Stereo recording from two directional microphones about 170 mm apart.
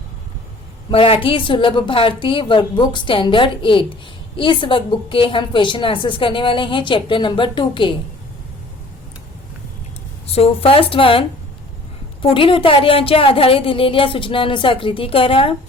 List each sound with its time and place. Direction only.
0.9 s a woman's voice: 30° left (ahead or behind)
10.2 s a woman's voice: 35° left (ahead or behind)